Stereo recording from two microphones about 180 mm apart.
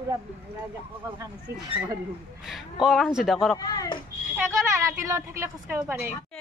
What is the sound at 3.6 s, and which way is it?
Speech, 20° left (ahead or behind).